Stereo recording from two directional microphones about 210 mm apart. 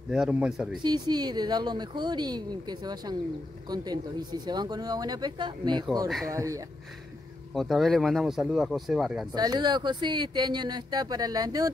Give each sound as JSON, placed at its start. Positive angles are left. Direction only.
{"t": 0.1, "sound": "speech", "side_deg": -5}
{"t": 0.8, "sound": "speech", "side_deg": -20}
{"t": 7.5, "sound": "speech", "side_deg": 0}
{"t": 9.3, "sound": "speech", "side_deg": -20}